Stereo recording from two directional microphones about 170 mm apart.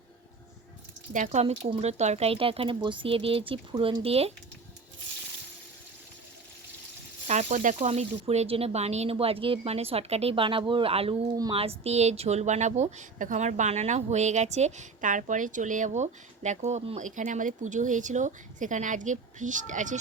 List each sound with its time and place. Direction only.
1.1 s speech: 45° right (ahead or behind)
7.3 s a woman's voice: 40° right (ahead or behind)